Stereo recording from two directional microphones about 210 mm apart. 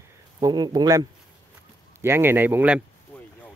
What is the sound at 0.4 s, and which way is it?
A man's voice, 20° right (ahead or behind).